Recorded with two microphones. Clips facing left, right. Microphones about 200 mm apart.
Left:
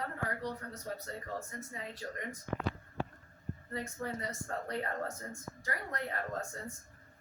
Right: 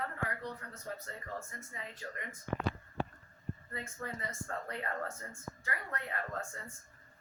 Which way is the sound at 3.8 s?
35° left (ahead or behind).